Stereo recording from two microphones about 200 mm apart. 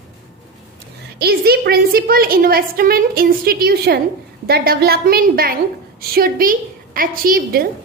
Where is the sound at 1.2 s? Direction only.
50° right (ahead or behind).